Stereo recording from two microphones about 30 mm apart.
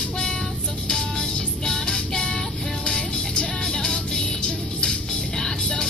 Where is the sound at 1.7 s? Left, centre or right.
Left.